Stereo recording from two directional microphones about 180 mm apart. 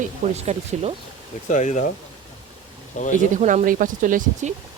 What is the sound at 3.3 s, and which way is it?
Speech, 45° right (ahead or behind).